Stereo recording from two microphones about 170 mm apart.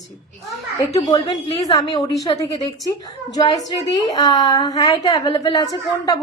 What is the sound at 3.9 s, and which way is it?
A woman's voice, 20° left (ahead or behind).